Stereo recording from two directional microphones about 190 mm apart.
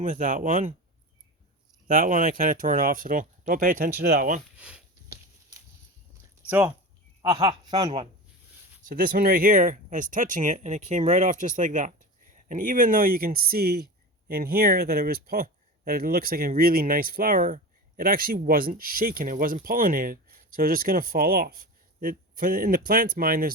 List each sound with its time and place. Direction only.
0.0 s speech: 45° right (ahead or behind)
1.9 s speech: 45° right (ahead or behind)
4.5 s speech: 5° right (ahead or behind)
5.5 s a sound: 15° right (ahead or behind)
6.5 s speech: 10° right (ahead or behind)
7.2 s speech: 20° right (ahead or behind)
8.9 s speech: 50° right (ahead or behind)